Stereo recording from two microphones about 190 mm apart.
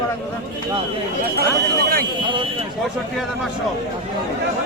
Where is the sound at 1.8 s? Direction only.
50° right (ahead or behind).